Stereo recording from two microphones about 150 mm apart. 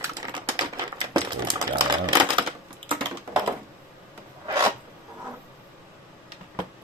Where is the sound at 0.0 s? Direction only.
30° right (ahead or behind).